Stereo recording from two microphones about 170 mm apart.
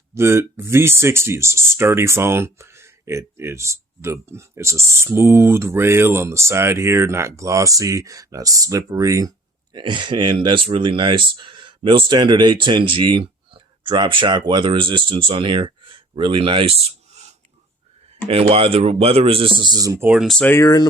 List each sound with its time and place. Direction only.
0.1 s speech: 15° right (ahead or behind); by 16.7 s 30° right (ahead or behind)
18.3 s speech: 35° right (ahead or behind)
20.1 s speech: centre (ahead or behind)
20.5 s speech: 20° left (ahead or behind)